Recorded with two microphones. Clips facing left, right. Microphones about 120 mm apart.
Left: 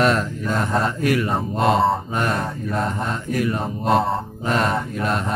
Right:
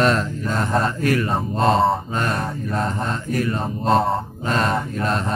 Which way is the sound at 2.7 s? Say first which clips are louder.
Even; 5° left (ahead or behind).